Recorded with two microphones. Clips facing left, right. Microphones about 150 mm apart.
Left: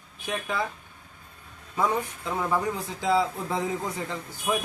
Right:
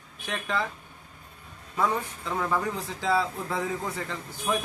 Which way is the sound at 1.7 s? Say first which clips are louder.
Left 1 dB; 15° left (ahead or behind).